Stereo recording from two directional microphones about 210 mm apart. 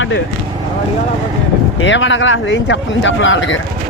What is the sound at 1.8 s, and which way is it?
Speech, 65° left (ahead or behind).